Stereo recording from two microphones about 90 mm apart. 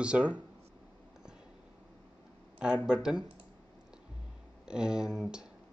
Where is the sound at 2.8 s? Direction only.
10° right (ahead or behind).